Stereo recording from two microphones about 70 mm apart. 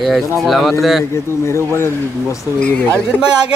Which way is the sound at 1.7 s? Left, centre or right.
Left.